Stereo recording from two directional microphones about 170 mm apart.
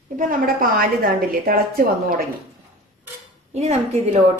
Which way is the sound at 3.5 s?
40° right (ahead or behind).